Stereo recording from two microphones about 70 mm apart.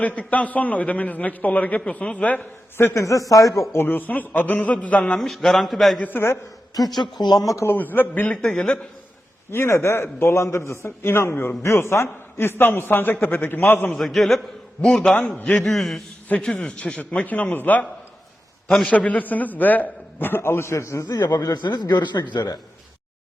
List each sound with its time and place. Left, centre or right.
0.0 s a man's voice: left
2.7 s a man's voice: left
3.8 s a man's voice: left
5.1 s a man's voice: centre
6.0 s a man's voice: left
7.0 s speech: left
7.5 s a man's voice: left
7.8 s a man's voice: left
8.3 s a man's voice: centre
9.5 s a man's voice: left
13.9 s a man's voice: centre
16.6 s a man's voice: centre
18.9 s a man's voice: left